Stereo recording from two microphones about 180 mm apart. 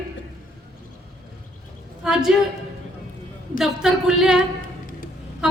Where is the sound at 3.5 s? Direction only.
Centre (ahead or behind).